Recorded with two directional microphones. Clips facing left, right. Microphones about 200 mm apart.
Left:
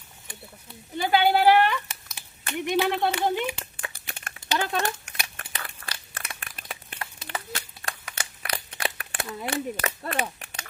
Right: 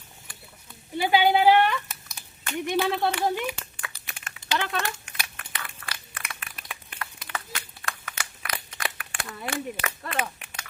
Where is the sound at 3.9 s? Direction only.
45° left (ahead or behind).